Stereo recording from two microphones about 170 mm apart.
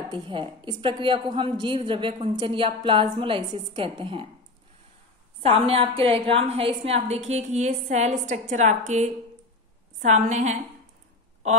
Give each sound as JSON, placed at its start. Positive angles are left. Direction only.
{"t": 0.1, "sound": "a woman's voice", "side_deg": -30}
{"t": 5.4, "sound": "a woman's voice", "side_deg": -35}